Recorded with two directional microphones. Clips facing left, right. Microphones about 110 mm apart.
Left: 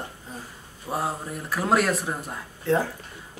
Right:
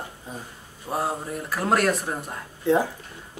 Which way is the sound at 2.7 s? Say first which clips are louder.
Right 2 dB; 15° right (ahead or behind).